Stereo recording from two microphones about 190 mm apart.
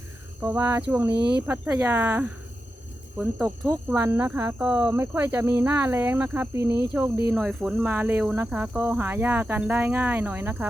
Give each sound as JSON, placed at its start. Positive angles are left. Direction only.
{"t": 0.4, "sound": "speech", "side_deg": -10}
{"t": 1.1, "sound": "speech", "side_deg": -60}
{"t": 1.4, "sound": "speech", "side_deg": -15}
{"t": 3.2, "sound": "speech", "side_deg": 5}
{"t": 3.7, "sound": "speech", "side_deg": -15}